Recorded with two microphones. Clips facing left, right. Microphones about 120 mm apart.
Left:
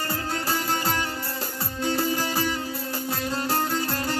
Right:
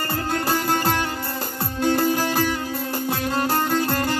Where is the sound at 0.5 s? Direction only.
55° right (ahead or behind).